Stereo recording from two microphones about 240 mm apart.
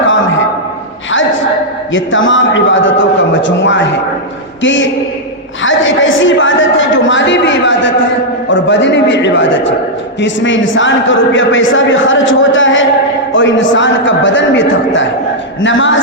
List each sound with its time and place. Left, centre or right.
1.9 s a man's voice: left